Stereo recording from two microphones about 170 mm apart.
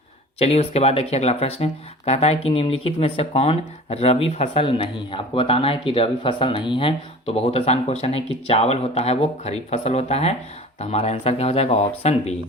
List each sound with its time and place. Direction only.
0.3 s speech: 35° left (ahead or behind)